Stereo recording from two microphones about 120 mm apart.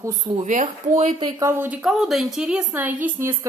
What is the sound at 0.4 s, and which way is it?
Speech, 85° right.